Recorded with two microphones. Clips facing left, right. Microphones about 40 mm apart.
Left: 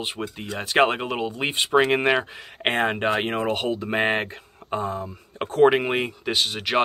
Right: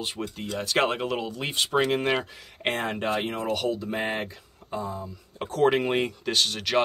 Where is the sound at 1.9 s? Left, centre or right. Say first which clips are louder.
Left 4 dB; left.